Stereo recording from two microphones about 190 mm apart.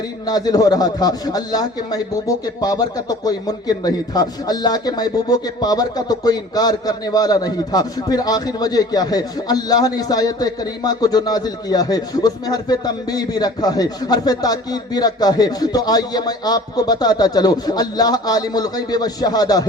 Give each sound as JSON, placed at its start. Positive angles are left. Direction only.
{"t": 0.3, "sound": "a man's voice", "side_deg": 20}